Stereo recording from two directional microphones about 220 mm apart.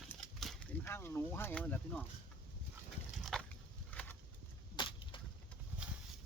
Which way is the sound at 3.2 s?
Centre (ahead or behind).